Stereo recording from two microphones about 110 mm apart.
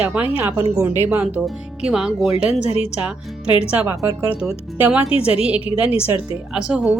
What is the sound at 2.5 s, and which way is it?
Speech, 75° left (ahead or behind).